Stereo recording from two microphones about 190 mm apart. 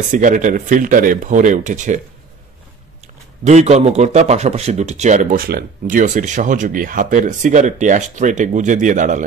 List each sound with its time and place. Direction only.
0.1 s a man's voice: 40° right (ahead or behind)
3.4 s a man's voice: 35° right (ahead or behind)